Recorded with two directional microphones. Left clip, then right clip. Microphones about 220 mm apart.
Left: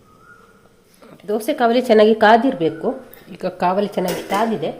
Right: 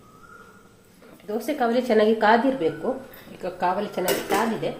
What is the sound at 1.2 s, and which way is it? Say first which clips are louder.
A woman's voice: left 7 dB; 50° left (ahead or behind).